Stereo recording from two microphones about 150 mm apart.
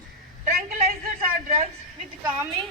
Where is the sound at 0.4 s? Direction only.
75° right (ahead or behind).